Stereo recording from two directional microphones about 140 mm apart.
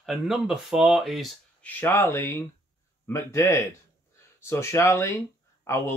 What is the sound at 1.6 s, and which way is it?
Speech, 15° left (ahead or behind).